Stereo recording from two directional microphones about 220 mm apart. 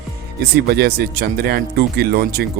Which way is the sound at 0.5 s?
45° right (ahead or behind).